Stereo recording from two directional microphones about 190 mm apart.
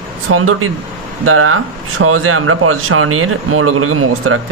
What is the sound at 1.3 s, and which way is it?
Speech, 90° right.